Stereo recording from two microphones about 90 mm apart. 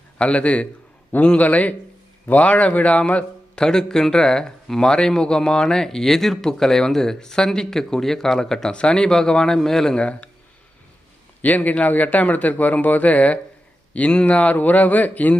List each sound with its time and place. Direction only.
0.2 s a man's voice: 10° left (ahead or behind)
11.4 s a man's voice: 15° left (ahead or behind)